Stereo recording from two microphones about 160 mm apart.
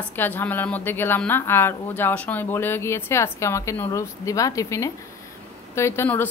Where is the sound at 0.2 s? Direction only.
10° left (ahead or behind).